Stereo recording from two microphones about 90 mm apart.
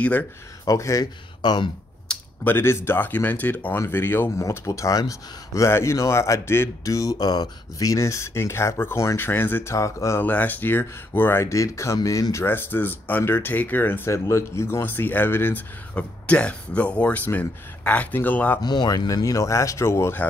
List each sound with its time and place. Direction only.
0.7 s speech: 40° left (ahead or behind)
1.4 s speech: 55° left (ahead or behind)
2.1 s a sound: 10° left (ahead or behind)
2.4 s speech: 25° left (ahead or behind)
4.4 s speech: 35° left (ahead or behind)
9.8 s speech: 35° left (ahead or behind)
10.2 s speech: 20° left (ahead or behind)
18.6 s speech: 50° left (ahead or behind); by 20.2 s 30° left (ahead or behind)